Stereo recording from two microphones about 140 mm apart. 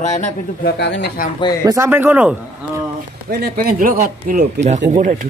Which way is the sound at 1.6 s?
20° right (ahead or behind).